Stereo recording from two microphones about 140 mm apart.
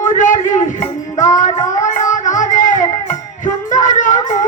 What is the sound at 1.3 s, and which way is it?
Child singing, 55° left (ahead or behind).